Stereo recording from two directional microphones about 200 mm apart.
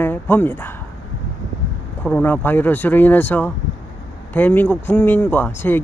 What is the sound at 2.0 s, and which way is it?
Speech, 10° left (ahead or behind).